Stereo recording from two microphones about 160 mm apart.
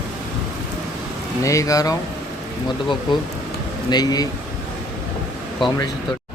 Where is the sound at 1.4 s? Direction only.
20° left (ahead or behind).